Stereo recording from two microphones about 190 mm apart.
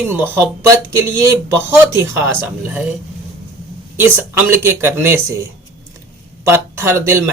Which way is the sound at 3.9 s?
10° right (ahead or behind).